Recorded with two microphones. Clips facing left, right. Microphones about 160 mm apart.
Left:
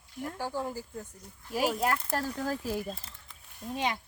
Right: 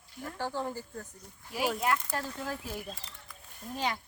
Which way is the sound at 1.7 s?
40° left (ahead or behind).